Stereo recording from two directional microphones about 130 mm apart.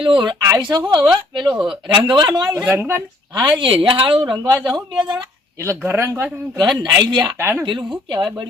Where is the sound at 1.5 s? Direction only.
5° right (ahead or behind).